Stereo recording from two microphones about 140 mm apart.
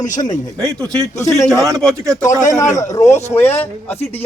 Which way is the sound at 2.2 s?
20° left (ahead or behind).